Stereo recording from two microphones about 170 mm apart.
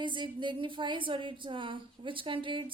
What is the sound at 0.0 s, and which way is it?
A woman's voice, 30° right (ahead or behind).